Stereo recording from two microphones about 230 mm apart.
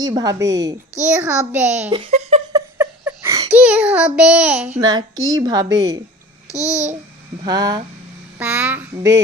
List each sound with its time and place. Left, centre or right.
0.0 s speech: centre
1.2 s a child's voice: centre
1.9 s speech: right
2.6 s child singing: centre
4.8 s speech: centre
6.5 s babbling: centre
7.4 s speech: centre
8.4 s speech: centre